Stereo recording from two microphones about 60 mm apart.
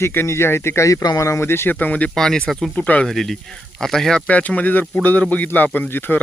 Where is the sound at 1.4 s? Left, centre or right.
Left.